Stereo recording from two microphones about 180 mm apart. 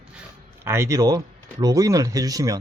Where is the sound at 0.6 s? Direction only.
15° right (ahead or behind).